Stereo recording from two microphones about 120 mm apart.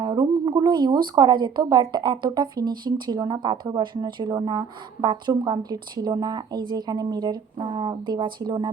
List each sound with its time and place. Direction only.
0.0 s speech: 35° right (ahead or behind)